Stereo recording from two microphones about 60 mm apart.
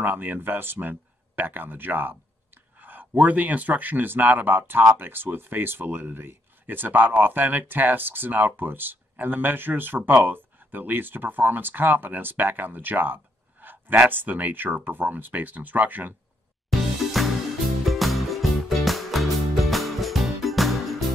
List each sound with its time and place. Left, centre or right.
0.0 s speech: right
16.8 s music: centre